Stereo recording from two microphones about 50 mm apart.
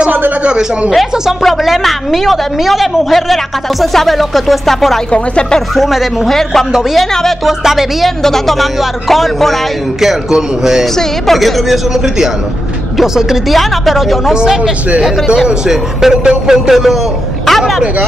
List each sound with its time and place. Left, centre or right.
0.4 s speech: centre
0.8 s a woman's voice: centre
5.1 s speech: left
5.8 s a woman's voice: centre
7.4 s a woman's voice: centre
8.2 s a woman's voice: centre
11.0 s a woman's voice: centre
14.3 s a woman's voice: centre